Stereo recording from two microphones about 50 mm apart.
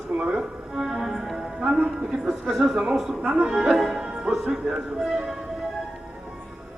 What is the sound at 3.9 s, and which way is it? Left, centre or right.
Music, centre.